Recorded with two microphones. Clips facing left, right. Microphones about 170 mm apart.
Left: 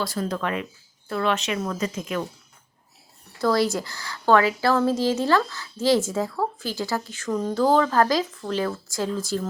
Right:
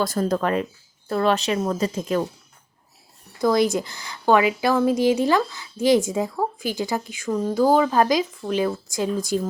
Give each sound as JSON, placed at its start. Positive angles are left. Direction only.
{"t": 0.0, "sound": "speech", "side_deg": -45}
{"t": 3.4, "sound": "a woman's voice", "side_deg": -20}